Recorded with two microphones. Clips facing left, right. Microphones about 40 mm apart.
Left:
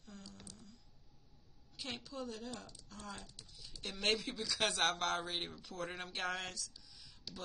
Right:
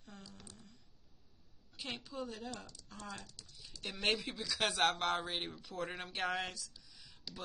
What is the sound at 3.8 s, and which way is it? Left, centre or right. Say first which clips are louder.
Speech: right 1 dB; centre.